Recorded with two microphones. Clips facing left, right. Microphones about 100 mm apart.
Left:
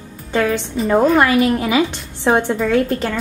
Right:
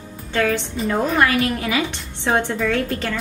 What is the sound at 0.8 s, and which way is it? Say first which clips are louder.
A woman's voice: left 5 dB; 30° left (ahead or behind).